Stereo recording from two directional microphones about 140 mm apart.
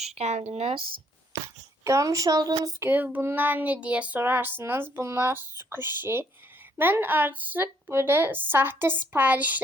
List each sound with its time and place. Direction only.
0.0 s speech: 50° right (ahead or behind)
1.8 s a woman's voice: 20° right (ahead or behind)
2.8 s speech: 15° right (ahead or behind)